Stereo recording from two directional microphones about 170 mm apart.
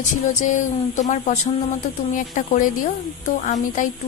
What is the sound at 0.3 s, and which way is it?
A woman's voice, 45° left (ahead or behind).